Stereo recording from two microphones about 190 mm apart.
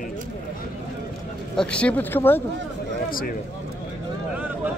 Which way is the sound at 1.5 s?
5° left (ahead or behind).